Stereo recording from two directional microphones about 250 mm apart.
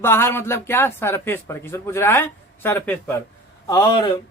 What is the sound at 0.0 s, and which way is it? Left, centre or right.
A man's voice, centre.